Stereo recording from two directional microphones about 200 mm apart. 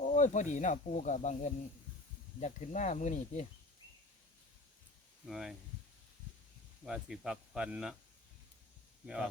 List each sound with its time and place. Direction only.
0.0 s speech: 40° left (ahead or behind)
5.2 s speech: centre (ahead or behind)
6.8 s speech: 5° right (ahead or behind)